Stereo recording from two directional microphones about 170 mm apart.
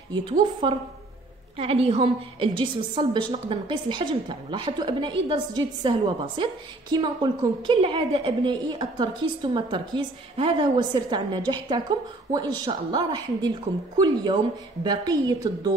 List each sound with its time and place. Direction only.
0.1 s a woman's voice: 30° right (ahead or behind)